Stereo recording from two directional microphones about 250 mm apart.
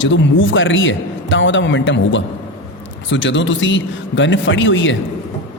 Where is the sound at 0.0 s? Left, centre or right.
Left.